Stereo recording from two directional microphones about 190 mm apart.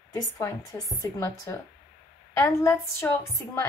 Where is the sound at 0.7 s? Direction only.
15° left (ahead or behind).